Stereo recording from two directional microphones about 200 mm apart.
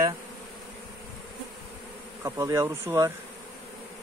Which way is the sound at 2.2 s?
15° right (ahead or behind).